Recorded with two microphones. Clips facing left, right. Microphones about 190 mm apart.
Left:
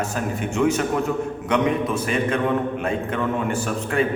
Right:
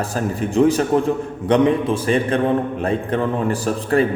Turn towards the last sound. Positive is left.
turn(degrees=-35)  # may be behind; listen again after turning